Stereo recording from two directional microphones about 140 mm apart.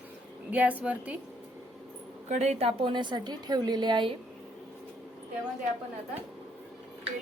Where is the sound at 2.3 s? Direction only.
50° right (ahead or behind); by 4.1 s 35° right (ahead or behind).